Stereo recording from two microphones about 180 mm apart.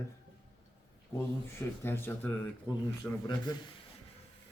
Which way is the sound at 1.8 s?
10° left (ahead or behind).